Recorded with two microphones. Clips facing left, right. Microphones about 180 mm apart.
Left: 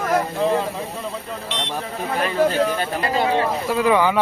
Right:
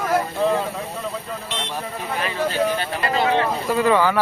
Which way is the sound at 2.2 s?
45° left (ahead or behind).